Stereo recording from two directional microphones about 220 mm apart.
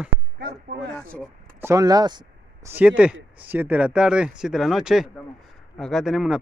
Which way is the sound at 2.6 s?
5° right (ahead or behind).